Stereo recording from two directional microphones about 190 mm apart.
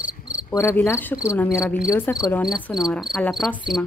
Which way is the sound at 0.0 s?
70° right (ahead or behind).